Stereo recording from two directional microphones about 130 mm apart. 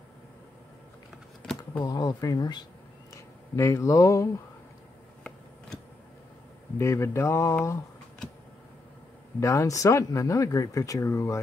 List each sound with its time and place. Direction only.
1.9 s speech: 30° left (ahead or behind)
6.8 s speech: 20° left (ahead or behind)
9.4 s speech: 25° left (ahead or behind)